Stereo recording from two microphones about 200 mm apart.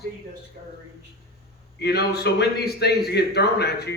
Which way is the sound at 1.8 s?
55° left (ahead or behind).